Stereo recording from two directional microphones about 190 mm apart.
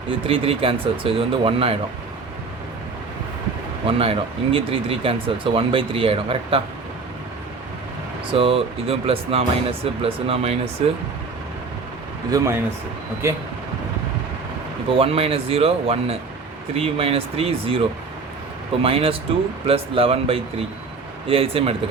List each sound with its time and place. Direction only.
0.3 s speech: 30° right (ahead or behind)
3.8 s speech: 30° right (ahead or behind)
8.3 s speech: 30° right (ahead or behind)
12.3 s speech: 20° right (ahead or behind)
14.9 s speech: 30° right (ahead or behind)